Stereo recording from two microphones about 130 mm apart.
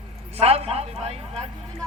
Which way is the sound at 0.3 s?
50° right (ahead or behind).